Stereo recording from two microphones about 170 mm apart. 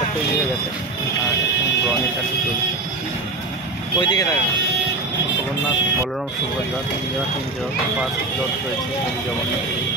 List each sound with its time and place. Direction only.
4.0 s speech: 25° left (ahead or behind)